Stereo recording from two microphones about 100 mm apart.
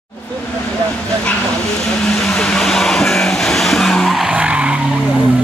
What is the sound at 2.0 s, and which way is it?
Vehicle, 5° left (ahead or behind).